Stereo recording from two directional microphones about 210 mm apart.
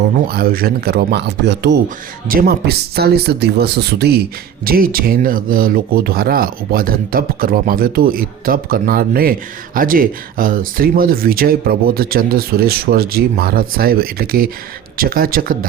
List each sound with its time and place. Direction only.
0.3 s speech: 45° right (ahead or behind)
2.2 s speech: 45° right (ahead or behind)